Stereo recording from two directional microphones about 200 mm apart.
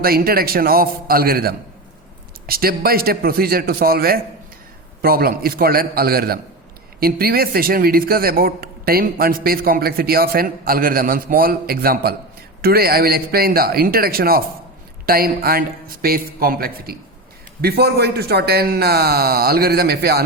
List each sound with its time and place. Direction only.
0.0 s a man's voice: 50° right (ahead or behind)